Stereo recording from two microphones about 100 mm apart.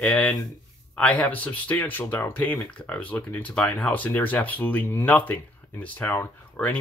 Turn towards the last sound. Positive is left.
turn(degrees=20)  # may be behind; listen again after turning